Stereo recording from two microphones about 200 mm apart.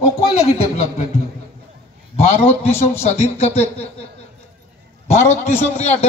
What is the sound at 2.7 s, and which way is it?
Speech, 10° left (ahead or behind).